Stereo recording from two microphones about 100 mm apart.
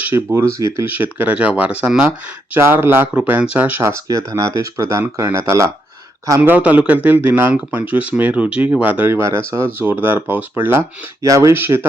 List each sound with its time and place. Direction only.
0.1 s speech: 25° right (ahead or behind)
0.9 s speech: 20° right (ahead or behind)
6.4 s speech: 15° right (ahead or behind)